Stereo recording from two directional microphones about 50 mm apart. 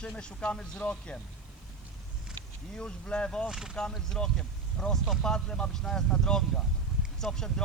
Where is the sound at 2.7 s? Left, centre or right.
Centre.